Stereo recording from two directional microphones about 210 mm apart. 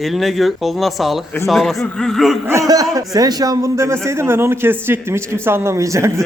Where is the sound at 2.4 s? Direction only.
15° right (ahead or behind).